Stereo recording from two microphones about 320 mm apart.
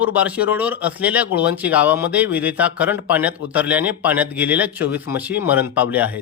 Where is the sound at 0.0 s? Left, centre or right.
Centre.